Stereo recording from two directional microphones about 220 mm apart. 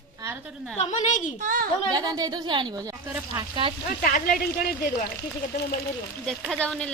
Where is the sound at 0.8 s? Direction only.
35° left (ahead or behind).